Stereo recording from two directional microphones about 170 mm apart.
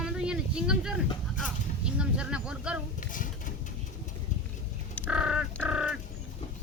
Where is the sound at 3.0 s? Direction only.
50° left (ahead or behind).